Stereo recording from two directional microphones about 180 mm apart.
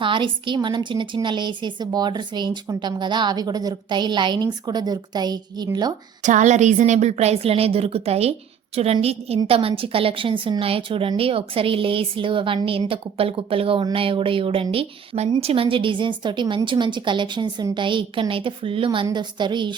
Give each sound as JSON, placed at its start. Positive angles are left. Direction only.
{"t": 0.0, "sound": "a woman's voice", "side_deg": -25}
{"t": 6.2, "sound": "a woman's voice", "side_deg": -40}